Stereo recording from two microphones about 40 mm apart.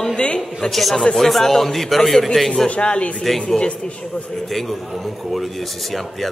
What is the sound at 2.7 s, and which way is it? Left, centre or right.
Speech, left.